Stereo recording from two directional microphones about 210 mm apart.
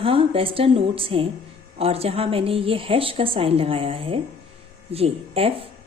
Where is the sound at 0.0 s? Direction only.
25° right (ahead or behind).